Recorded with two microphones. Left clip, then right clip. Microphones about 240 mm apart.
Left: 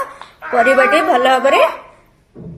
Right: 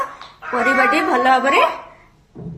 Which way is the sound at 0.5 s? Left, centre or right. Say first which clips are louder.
Left 4 dB; centre.